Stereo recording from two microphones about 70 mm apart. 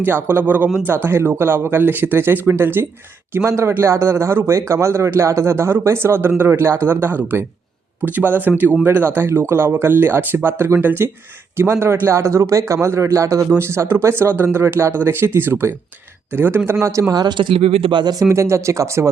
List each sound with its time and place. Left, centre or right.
0.0 s a man's voice: right
13.6 s a man's voice: right
17.1 s speech: right
17.9 s speech: right
18.2 s speech: right